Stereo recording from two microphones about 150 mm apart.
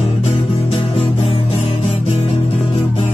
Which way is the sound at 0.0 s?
45° left (ahead or behind).